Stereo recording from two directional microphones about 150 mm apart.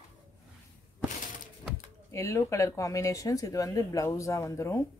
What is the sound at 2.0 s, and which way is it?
Speech, 20° left (ahead or behind).